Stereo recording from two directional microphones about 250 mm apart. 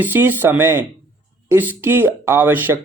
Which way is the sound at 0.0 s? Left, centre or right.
Centre.